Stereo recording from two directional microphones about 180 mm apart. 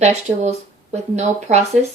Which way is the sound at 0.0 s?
40° right (ahead or behind).